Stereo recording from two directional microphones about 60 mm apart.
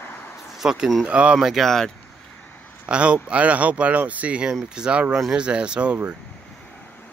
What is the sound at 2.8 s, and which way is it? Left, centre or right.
Speech, centre.